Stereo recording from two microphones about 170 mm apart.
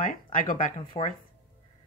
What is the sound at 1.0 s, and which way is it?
Speech, 35° left (ahead or behind).